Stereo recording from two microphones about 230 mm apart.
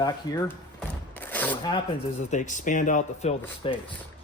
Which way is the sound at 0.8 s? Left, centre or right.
Centre.